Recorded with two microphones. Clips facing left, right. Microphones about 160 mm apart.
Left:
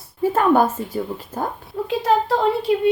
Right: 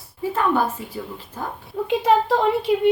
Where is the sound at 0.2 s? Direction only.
45° left (ahead or behind).